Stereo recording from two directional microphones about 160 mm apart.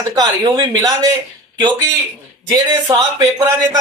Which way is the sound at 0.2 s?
25° right (ahead or behind).